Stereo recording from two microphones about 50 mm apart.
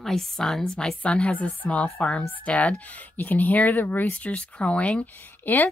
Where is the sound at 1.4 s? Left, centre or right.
Left.